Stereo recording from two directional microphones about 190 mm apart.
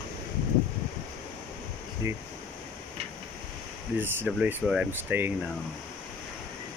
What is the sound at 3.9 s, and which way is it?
Speech, 10° right (ahead or behind).